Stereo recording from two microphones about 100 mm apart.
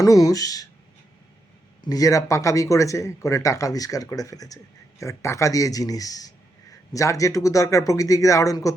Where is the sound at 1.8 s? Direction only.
35° left (ahead or behind).